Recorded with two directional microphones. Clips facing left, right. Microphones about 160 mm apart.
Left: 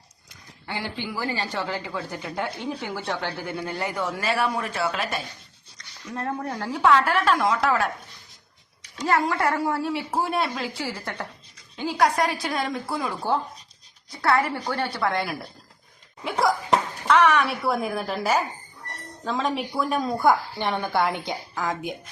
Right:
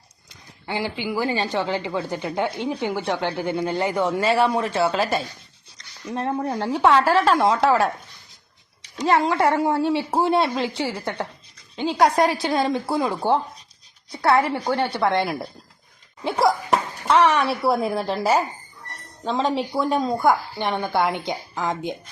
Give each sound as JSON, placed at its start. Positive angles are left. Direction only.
{"t": 0.7, "sound": "speech", "side_deg": -20}
{"t": 17.1, "sound": "speech", "side_deg": -30}